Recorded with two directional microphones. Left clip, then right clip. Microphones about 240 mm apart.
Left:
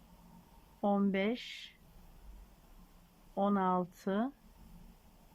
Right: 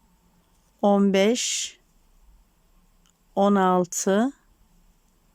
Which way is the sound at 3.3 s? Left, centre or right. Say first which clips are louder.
Right 12 dB; right.